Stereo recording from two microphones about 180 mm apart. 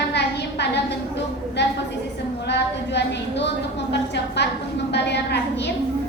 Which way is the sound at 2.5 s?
75° left (ahead or behind).